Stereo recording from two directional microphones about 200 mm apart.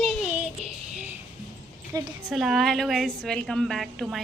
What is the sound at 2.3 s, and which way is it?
A woman's voice, centre (ahead or behind).